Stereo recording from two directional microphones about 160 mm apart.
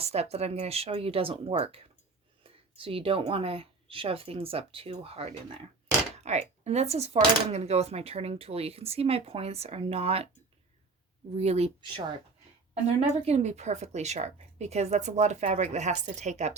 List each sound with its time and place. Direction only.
0.0 s speech: 40° right (ahead or behind)
11.3 s speech: 40° right (ahead or behind)